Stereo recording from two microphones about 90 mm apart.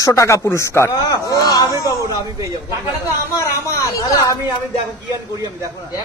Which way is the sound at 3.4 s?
35° left (ahead or behind).